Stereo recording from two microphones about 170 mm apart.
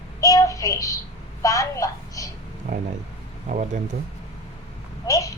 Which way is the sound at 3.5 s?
45° right (ahead or behind).